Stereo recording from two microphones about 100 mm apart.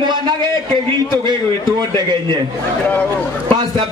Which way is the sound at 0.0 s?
50° right (ahead or behind).